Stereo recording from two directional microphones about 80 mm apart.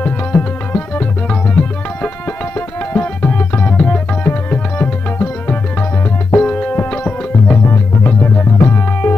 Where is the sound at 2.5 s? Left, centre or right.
Centre.